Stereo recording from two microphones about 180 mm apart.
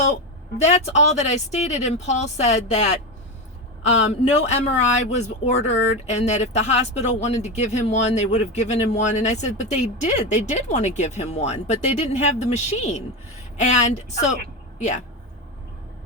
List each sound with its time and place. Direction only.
0.5 s speech: 35° left (ahead or behind)